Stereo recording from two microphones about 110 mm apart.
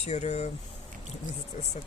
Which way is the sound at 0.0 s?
90° left.